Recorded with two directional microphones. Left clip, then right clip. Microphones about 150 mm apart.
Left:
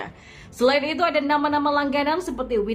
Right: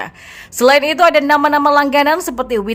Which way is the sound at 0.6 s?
35° right (ahead or behind).